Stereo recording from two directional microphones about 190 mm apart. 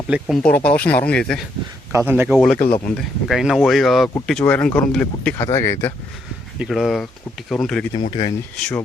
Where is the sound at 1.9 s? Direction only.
15° right (ahead or behind).